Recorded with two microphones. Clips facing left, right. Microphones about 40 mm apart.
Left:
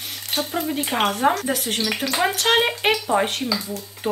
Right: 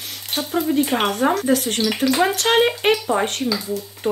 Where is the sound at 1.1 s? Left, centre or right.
Centre.